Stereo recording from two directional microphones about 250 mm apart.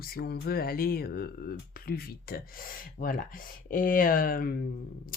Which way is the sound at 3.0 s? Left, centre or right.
Left.